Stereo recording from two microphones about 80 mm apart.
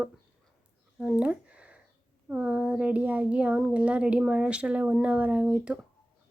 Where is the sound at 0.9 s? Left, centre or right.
Centre.